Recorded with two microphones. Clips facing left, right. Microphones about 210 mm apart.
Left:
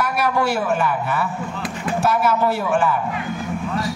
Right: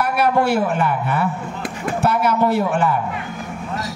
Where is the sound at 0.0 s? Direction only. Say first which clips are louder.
Right 3 dB; 60° right (ahead or behind).